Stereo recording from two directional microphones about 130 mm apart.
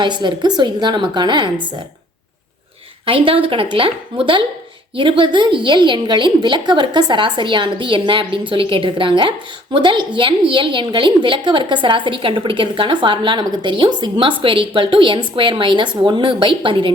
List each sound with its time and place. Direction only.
0.0 s a woman's voice: 35° right (ahead or behind)
3.1 s a woman's voice: 45° right (ahead or behind)